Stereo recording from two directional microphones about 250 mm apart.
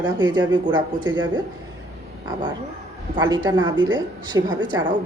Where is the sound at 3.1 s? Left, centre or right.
Centre.